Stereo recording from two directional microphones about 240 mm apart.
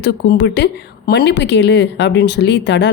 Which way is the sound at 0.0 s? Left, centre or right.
Left.